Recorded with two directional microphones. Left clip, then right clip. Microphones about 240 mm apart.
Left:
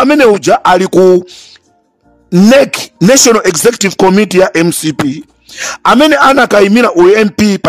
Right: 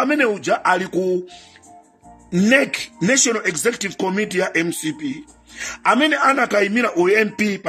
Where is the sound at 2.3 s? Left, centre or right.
Left.